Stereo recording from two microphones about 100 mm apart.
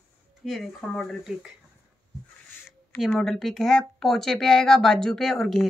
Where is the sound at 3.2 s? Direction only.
5° left (ahead or behind).